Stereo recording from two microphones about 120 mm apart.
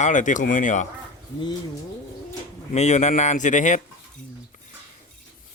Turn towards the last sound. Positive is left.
turn(degrees=90)